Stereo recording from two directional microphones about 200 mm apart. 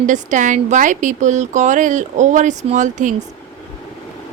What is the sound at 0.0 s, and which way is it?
A woman's voice, 40° right (ahead or behind).